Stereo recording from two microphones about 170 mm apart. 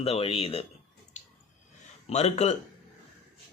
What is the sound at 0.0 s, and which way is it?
Speech, 35° left (ahead or behind).